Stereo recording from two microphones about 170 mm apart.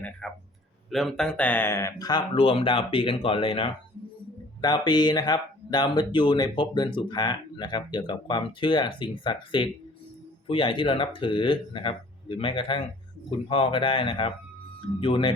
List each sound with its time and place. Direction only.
0.2 s speech: centre (ahead or behind); by 15.3 s 30° left (ahead or behind)